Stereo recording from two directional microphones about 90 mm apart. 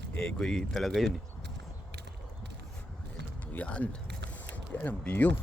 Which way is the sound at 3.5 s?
15° left (ahead or behind).